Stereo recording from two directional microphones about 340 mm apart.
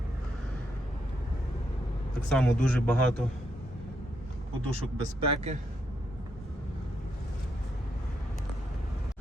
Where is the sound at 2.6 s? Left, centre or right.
Centre.